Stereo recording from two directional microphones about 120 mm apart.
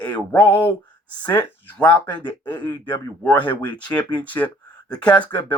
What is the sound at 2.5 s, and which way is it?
Speech, 40° left (ahead or behind).